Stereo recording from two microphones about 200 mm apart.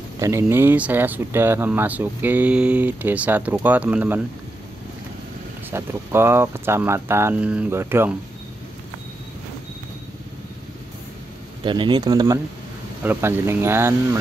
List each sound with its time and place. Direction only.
0.2 s speech: 15° right (ahead or behind)
5.7 s speech: 10° right (ahead or behind)
11.6 s speech: 25° right (ahead or behind)